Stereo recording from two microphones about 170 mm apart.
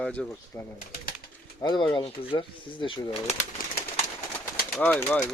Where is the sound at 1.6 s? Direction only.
25° left (ahead or behind).